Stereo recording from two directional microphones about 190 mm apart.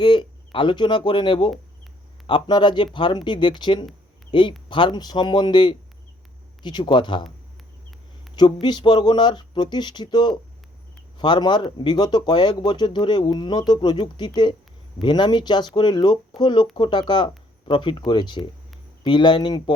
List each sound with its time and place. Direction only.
0.0 s speech: 25° left (ahead or behind)
8.6 s speech: 25° left (ahead or behind)